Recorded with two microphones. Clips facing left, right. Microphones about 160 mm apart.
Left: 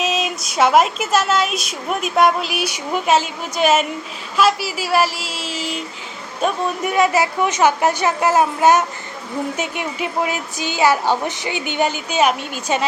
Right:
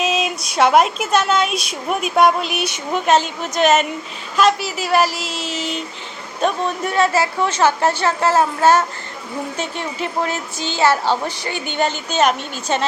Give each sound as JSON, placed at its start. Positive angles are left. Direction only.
{"t": 0.0, "sound": "a woman's voice", "side_deg": 0}